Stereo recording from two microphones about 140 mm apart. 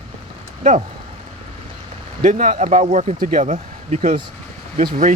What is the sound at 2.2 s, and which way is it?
Speech, 65° right (ahead or behind).